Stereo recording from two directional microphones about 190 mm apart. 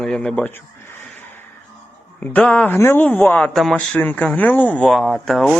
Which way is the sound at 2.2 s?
5° left (ahead or behind).